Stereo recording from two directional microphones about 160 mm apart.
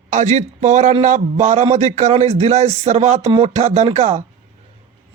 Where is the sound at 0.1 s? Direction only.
45° right (ahead or behind).